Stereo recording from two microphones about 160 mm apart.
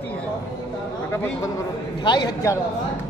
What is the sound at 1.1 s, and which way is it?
A man's voice, 15° left (ahead or behind).